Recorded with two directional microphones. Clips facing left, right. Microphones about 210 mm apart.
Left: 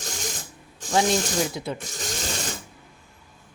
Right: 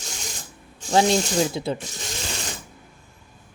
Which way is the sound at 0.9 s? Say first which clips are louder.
Right 3 dB; 25° right (ahead or behind).